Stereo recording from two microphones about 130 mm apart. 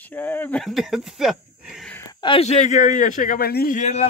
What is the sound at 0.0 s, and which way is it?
Speech, 15° left (ahead or behind).